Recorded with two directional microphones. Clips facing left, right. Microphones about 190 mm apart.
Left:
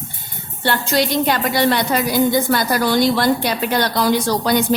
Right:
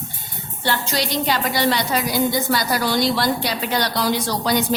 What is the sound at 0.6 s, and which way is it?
A woman's voice, 55° left (ahead or behind).